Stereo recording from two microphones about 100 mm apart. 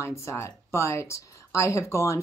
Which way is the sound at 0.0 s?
30° left (ahead or behind).